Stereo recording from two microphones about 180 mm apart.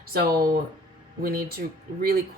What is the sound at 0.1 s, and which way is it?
Speech, 55° right (ahead or behind).